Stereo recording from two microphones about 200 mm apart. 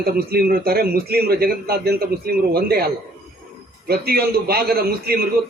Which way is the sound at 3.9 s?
50° right (ahead or behind).